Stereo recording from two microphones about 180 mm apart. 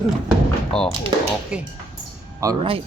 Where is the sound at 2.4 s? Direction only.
15° right (ahead or behind).